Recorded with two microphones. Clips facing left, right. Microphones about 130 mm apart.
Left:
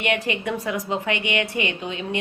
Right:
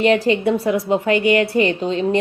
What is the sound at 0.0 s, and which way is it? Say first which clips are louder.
A woman's voice: right 9 dB; 30° right (ahead or behind).